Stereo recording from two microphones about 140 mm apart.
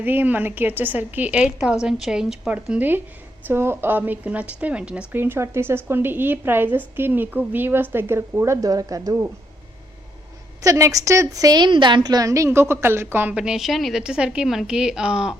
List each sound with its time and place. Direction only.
0.0 s a woman's voice: 15° right (ahead or behind)
10.6 s a woman's voice: 25° right (ahead or behind); by 15.4 s 5° right (ahead or behind)